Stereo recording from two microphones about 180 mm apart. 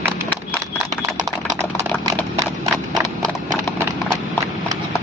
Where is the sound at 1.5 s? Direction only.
15° right (ahead or behind).